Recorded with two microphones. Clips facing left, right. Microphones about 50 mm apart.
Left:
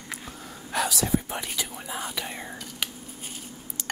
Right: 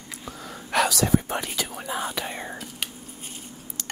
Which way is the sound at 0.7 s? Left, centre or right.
Right.